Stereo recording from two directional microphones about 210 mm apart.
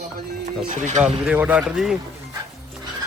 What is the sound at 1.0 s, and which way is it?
Speech, 5° right (ahead or behind).